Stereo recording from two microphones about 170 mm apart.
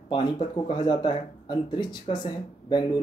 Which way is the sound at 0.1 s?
30° left (ahead or behind).